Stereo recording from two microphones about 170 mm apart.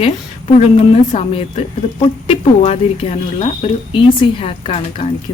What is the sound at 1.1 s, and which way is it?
Speech, 40° left (ahead or behind).